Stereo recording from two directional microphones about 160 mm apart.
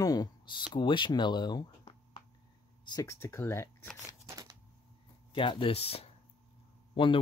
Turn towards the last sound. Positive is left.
turn(degrees=35)  # may be behind; listen again after turning